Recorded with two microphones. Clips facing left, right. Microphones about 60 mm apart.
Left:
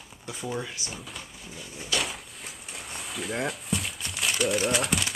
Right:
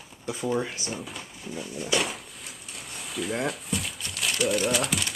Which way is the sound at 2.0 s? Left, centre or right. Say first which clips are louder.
Right 2 dB; centre.